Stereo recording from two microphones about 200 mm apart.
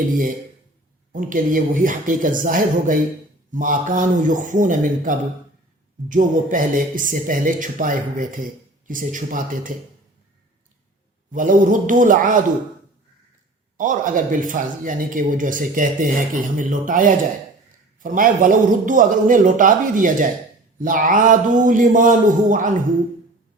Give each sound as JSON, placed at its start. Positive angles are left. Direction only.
{"t": 1.1, "sound": "speech", "side_deg": -40}
{"t": 11.3, "sound": "speech", "side_deg": -40}
{"t": 13.7, "sound": "speech", "side_deg": -40}